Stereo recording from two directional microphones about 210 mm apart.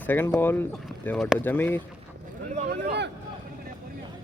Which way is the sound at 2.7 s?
55° right (ahead or behind).